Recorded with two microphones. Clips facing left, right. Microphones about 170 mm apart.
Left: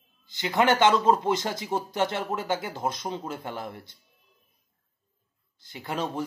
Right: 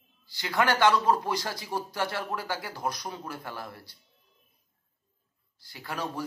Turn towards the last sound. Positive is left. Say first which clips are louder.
# left 4 dB
turn(degrees=20)  # may be behind; listen again after turning